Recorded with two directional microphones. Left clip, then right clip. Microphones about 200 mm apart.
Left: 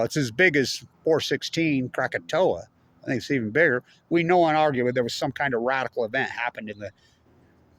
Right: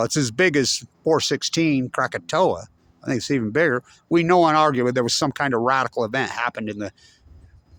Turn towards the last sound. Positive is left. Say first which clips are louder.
# right 5 dB
turn(degrees=-45)  # may be behind; listen again after turning